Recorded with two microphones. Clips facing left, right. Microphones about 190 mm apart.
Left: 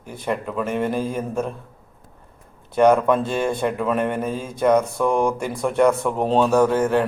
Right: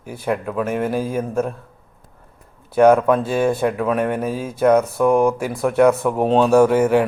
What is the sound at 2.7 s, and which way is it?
Speech, 5° right (ahead or behind).